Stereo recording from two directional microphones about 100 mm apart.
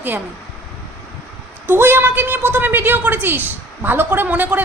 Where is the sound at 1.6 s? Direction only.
20° right (ahead or behind).